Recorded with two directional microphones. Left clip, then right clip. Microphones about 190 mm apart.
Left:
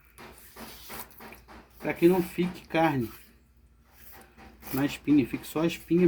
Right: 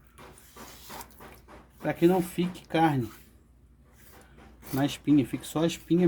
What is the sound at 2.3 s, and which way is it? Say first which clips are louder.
Speech: even; 60° right (ahead or behind).